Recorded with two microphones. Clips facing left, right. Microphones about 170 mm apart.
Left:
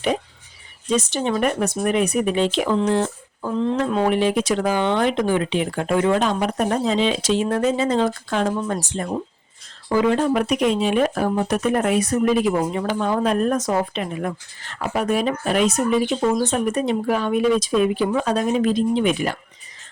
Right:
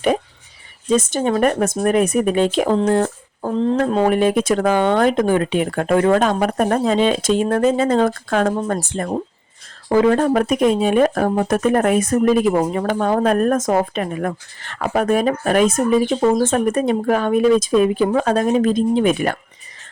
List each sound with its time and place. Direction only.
0.9 s speech: 50° right (ahead or behind)